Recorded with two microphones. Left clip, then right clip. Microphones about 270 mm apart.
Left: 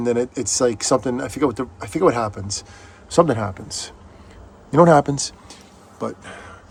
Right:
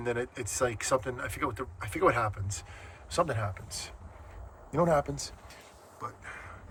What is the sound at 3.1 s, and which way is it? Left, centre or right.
Speech, left.